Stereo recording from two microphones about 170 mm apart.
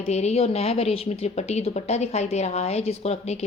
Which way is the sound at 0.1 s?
40° left (ahead or behind).